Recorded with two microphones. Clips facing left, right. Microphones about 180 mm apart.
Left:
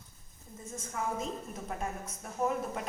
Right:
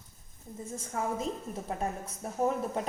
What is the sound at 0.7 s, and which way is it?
A woman's voice, 35° right (ahead or behind).